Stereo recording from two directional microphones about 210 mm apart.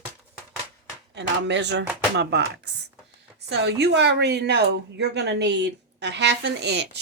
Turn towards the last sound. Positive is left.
turn(degrees=-55)  # may be behind; listen again after turning